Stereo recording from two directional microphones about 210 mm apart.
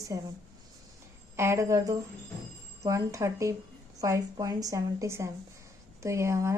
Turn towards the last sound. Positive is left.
turn(degrees=-15)  # may be behind; listen again after turning